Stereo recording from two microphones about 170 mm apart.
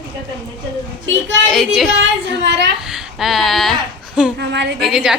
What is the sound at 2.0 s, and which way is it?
Speech, 90° right.